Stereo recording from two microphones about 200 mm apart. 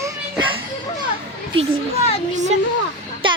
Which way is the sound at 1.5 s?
30° right (ahead or behind).